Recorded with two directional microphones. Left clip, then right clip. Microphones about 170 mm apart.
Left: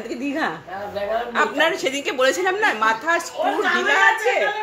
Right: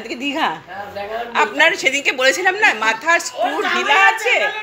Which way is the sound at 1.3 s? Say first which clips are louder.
Right 6 dB; 15° left (ahead or behind).